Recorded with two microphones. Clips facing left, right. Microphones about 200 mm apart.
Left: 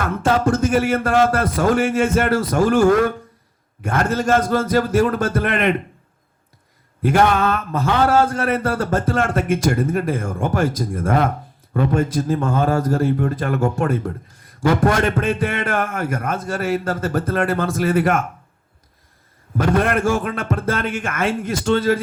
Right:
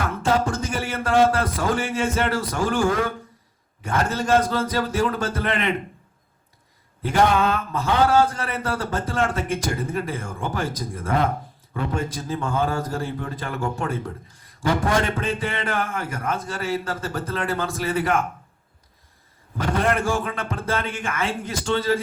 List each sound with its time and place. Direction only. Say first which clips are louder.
0.4 s a man's voice: left 9 dB; 55° left (ahead or behind)
7.1 s a man's voice: left 2 dB; 55° left (ahead or behind)
19.7 s a man's voice: left 3 dB; 55° left (ahead or behind)